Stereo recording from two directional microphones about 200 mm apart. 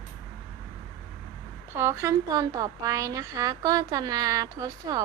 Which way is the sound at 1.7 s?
10° right (ahead or behind).